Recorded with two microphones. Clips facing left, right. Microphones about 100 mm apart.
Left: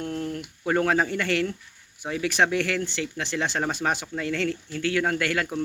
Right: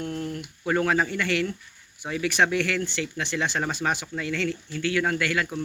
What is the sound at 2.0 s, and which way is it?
Speech, 30° left (ahead or behind).